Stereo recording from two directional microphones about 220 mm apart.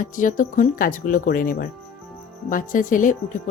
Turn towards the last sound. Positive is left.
turn(degrees=35)  # may be behind; listen again after turning